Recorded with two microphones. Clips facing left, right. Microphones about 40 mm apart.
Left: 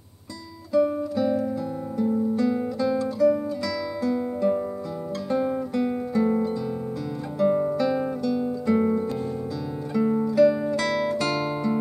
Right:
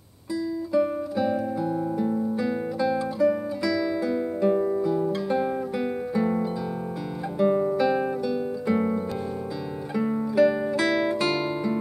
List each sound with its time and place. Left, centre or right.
0.7 s guitar: centre
2.0 s music: centre
7.3 s guitar: centre
9.9 s music: centre